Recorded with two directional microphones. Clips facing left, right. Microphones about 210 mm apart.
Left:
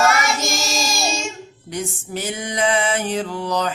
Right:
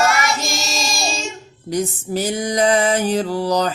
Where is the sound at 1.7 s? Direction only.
35° right (ahead or behind).